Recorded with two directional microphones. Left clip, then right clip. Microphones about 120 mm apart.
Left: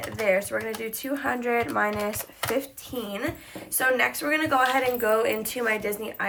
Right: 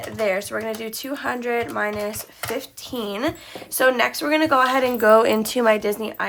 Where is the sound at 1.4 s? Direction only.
5° right (ahead or behind).